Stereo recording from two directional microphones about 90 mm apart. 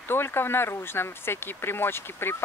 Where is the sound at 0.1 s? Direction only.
25° left (ahead or behind).